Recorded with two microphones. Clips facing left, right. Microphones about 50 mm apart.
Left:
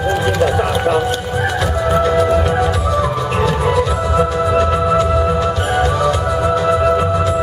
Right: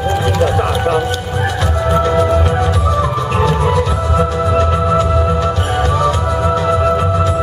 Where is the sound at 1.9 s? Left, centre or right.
Centre.